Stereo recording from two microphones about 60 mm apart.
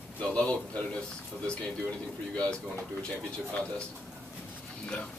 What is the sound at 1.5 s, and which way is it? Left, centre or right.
A man's voice, centre.